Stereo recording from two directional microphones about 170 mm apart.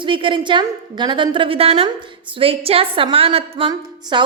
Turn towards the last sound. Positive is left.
turn(degrees=-30)  # may be behind; listen again after turning